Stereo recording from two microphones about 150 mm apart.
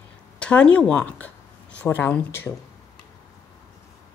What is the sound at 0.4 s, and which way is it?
Speech, 10° left (ahead or behind).